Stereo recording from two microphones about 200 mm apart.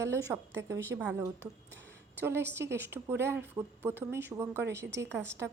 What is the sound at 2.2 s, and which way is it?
A woman's voice, 10° right (ahead or behind).